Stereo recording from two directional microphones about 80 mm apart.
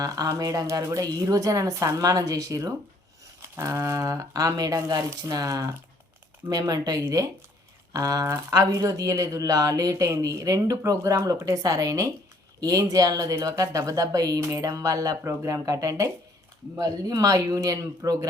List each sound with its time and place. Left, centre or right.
0.0 s speech: right